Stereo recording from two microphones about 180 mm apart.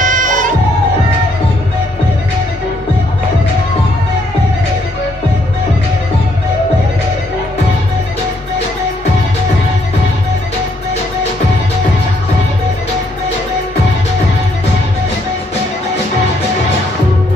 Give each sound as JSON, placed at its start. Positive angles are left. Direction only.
{"t": 0.0, "sound": "music", "side_deg": -45}